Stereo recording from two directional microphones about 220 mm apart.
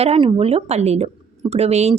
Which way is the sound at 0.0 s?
25° right (ahead or behind).